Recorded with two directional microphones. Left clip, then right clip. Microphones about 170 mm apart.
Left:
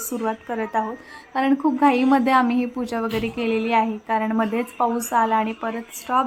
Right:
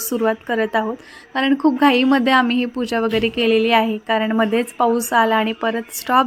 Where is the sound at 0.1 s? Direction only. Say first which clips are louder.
Right 7 dB; 25° right (ahead or behind).